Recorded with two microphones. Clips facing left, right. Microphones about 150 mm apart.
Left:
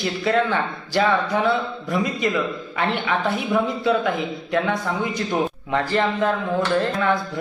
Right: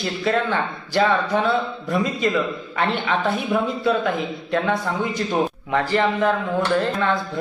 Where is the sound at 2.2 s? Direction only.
20° left (ahead or behind).